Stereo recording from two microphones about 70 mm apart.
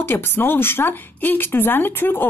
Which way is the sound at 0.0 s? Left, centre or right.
Left.